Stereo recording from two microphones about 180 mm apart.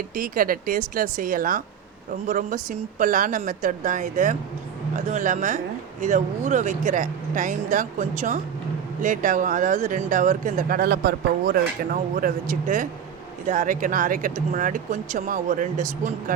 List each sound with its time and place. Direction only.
0.1 s speech: 50° right (ahead or behind)